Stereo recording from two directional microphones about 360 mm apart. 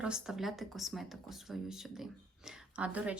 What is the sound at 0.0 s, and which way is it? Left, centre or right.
Speech, centre.